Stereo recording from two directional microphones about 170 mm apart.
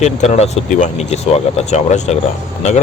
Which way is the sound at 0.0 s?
40° left (ahead or behind).